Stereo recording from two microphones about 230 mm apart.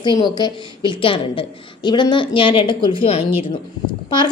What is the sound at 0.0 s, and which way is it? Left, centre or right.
A woman's voice, centre.